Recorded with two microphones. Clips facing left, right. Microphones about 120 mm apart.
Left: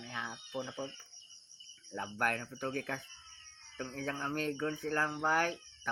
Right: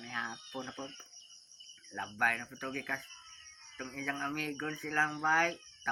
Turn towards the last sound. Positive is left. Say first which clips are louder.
# right 1 dB
turn(degrees=20)  # may be behind; listen again after turning